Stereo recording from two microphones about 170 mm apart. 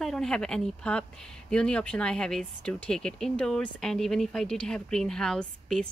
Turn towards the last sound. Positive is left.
turn(degrees=5)  # may be behind; listen again after turning